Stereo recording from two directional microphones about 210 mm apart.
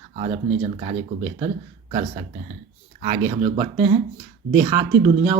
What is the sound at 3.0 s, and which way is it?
Speech, 30° right (ahead or behind).